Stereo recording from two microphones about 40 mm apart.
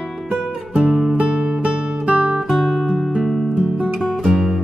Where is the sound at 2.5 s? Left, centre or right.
Centre.